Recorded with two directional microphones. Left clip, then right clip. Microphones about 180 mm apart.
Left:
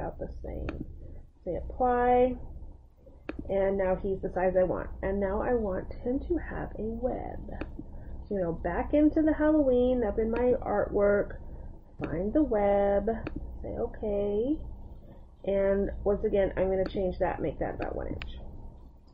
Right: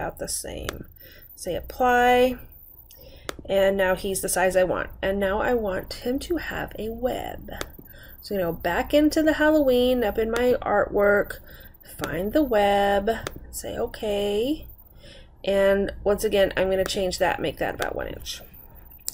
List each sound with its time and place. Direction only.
0.0 s a woman's voice: 25° right (ahead or behind)
3.4 s a woman's voice: 20° right (ahead or behind)